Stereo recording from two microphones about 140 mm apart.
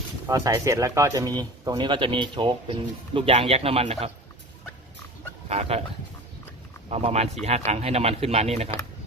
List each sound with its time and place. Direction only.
0.3 s speech: 20° right (ahead or behind); by 3.9 s 45° right (ahead or behind)
5.5 s speech: 45° right (ahead or behind)
6.9 s speech: 50° right (ahead or behind)